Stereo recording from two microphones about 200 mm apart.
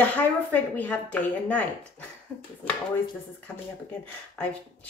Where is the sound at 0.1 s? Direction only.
5° left (ahead or behind).